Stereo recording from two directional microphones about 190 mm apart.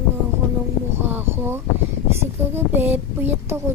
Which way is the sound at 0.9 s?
10° right (ahead or behind).